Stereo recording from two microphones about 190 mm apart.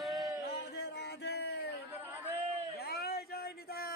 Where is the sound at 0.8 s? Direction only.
60° left (ahead or behind).